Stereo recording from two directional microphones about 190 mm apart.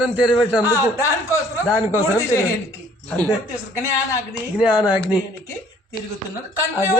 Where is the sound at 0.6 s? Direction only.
20° left (ahead or behind).